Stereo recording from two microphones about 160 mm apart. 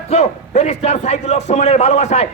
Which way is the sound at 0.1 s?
40° left (ahead or behind).